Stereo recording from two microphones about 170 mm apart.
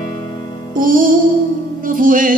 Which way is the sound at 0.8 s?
55° right (ahead or behind).